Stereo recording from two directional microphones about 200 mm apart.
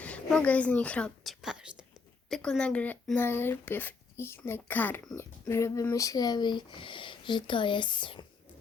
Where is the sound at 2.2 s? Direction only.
Centre (ahead or behind).